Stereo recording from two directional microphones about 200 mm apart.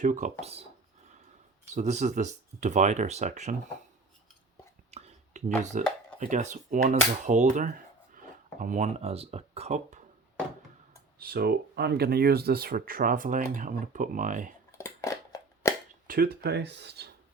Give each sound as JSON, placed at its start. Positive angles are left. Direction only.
{"t": 0.0, "sound": "speech", "side_deg": -40}
{"t": 1.7, "sound": "speech", "side_deg": -35}
{"t": 4.9, "sound": "a sound", "side_deg": -30}
{"t": 5.7, "sound": "speech", "side_deg": -40}
{"t": 11.2, "sound": "speech", "side_deg": -50}
{"t": 14.7, "sound": "a sound", "side_deg": 15}
{"t": 16.0, "sound": "speech", "side_deg": -50}